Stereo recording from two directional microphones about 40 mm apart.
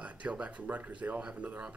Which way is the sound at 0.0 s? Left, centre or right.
Right.